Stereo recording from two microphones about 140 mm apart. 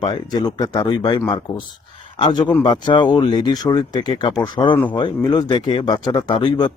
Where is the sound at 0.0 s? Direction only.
30° left (ahead or behind).